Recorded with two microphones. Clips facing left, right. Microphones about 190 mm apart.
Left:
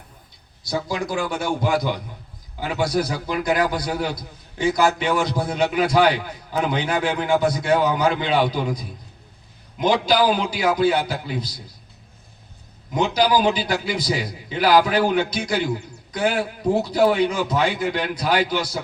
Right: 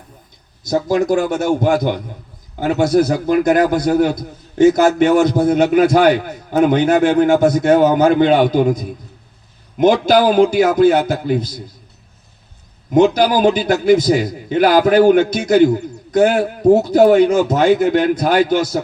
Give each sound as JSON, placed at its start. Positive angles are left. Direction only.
{"t": 0.6, "sound": "a man's voice", "side_deg": -45}
{"t": 12.9, "sound": "a man's voice", "side_deg": -50}